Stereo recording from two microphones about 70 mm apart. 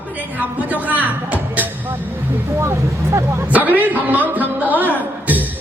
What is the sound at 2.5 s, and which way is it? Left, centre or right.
Speech, right.